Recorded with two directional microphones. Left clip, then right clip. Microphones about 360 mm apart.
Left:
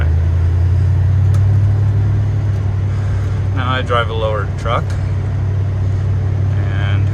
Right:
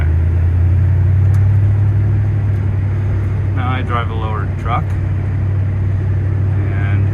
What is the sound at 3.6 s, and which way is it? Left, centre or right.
Vehicle, centre.